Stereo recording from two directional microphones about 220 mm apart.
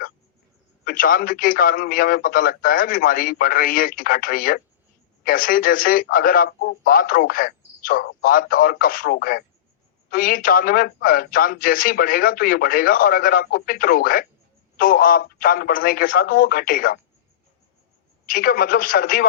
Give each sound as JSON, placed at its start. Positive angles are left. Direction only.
{"t": 0.9, "sound": "speech", "side_deg": 40}
{"t": 18.3, "sound": "speech", "side_deg": 40}